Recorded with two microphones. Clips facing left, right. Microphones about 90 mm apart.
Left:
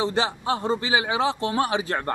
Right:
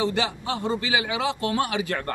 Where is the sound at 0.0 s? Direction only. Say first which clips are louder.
Left 1 dB; 30° left (ahead or behind).